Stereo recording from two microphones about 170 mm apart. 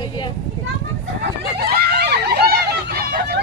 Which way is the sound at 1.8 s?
70° right (ahead or behind).